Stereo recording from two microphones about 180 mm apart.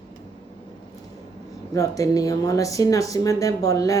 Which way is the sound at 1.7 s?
20° left (ahead or behind).